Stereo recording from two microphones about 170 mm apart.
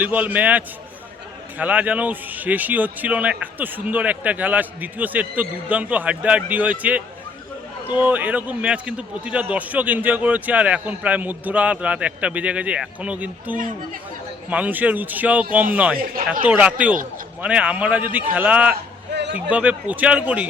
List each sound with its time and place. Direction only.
0.0 s speech: 10° right (ahead or behind)
16.0 s speech: 55° right (ahead or behind)
16.5 s speech: 10° right (ahead or behind)
19.1 s a sound: 90° right
19.5 s speech: 10° right (ahead or behind)